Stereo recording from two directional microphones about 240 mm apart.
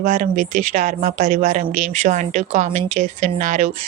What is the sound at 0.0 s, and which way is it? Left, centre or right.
Speech, right.